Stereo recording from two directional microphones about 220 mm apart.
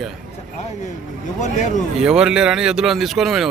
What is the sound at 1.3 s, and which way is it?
Speech, 35° left (ahead or behind).